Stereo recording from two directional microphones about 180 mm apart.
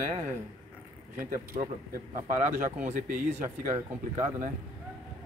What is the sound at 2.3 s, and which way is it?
Speech, 45° right (ahead or behind).